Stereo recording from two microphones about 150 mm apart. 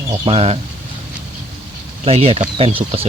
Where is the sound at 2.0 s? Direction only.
40° right (ahead or behind).